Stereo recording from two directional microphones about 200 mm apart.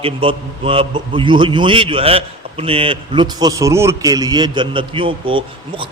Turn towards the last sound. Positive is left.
turn(degrees=-25)  # may be behind; listen again after turning